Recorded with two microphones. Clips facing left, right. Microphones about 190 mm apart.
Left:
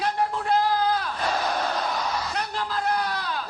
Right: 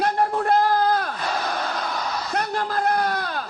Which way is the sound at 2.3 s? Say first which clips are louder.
Right 5 dB; 50° right (ahead or behind).